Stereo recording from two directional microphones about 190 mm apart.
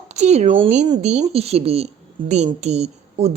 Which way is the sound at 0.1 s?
35° right (ahead or behind).